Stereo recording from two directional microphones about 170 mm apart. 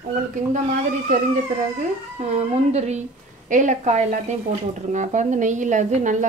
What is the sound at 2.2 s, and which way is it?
A woman's voice, 40° right (ahead or behind).